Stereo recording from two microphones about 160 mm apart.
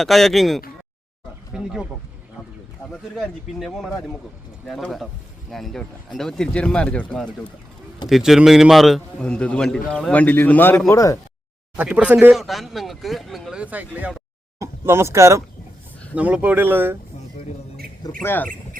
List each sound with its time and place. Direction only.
0.0 s speech: centre (ahead or behind)
3.2 s a man's voice: centre (ahead or behind); by 11.2 s 20° left (ahead or behind)
11.8 s speech: 10° right (ahead or behind)
16.1 s speech: 10° right (ahead or behind)
18.2 s a man's voice: 10° left (ahead or behind)